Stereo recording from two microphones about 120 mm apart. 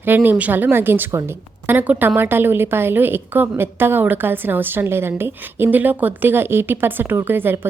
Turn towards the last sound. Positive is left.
turn(degrees=-15)  # may be behind; listen again after turning